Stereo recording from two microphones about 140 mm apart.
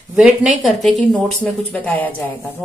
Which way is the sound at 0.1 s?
10° right (ahead or behind).